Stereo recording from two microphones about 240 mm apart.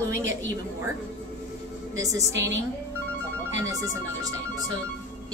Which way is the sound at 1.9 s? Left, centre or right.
Centre.